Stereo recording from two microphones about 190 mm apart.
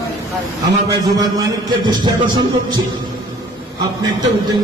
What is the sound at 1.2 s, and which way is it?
Speech, 20° right (ahead or behind).